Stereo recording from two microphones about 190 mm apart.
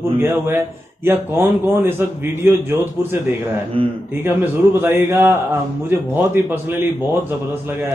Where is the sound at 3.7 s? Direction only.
30° right (ahead or behind).